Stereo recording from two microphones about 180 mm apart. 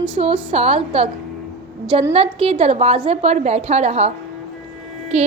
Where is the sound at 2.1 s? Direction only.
35° right (ahead or behind).